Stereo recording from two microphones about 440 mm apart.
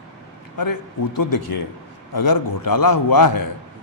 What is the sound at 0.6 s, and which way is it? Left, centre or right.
A man's voice, left.